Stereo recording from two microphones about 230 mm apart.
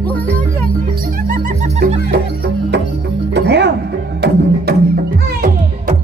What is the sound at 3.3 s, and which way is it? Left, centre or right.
Music, right.